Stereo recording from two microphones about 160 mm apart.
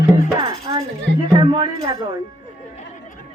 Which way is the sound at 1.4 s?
30° right (ahead or behind).